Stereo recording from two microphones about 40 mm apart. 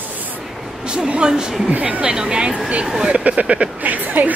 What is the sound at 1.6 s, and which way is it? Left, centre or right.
Speech, right.